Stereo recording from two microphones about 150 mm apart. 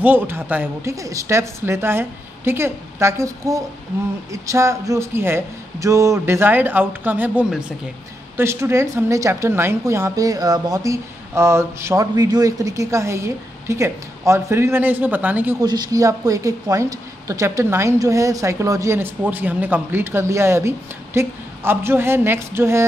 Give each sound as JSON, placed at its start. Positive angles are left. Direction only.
{"t": 0.0, "sound": "a woman's voice", "side_deg": -15}
{"t": 15.6, "sound": "a woman's voice", "side_deg": -25}